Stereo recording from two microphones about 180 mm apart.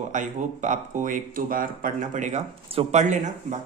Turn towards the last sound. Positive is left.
turn(degrees=-40)  # may be behind; listen again after turning